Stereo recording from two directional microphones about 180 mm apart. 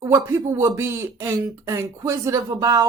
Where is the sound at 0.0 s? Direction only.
15° right (ahead or behind).